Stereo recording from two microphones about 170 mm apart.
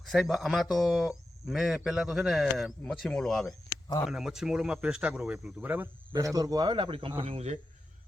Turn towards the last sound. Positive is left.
turn(degrees=-35)  # may be behind; listen again after turning